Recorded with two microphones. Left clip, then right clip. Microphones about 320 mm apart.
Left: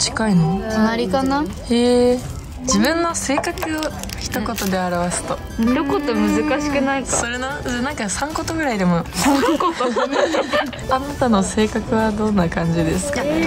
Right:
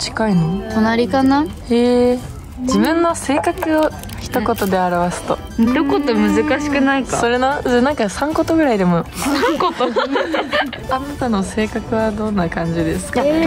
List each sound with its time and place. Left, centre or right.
0.0 s music: centre
0.7 s speech: right
1.7 s a woman's voice: centre
5.8 s speech: right
7.2 s a woman's voice: centre
9.3 s speech: right
10.9 s a woman's voice: centre
13.1 s a woman's voice: centre